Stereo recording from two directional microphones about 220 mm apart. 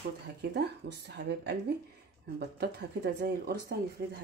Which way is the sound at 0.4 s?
50° right (ahead or behind).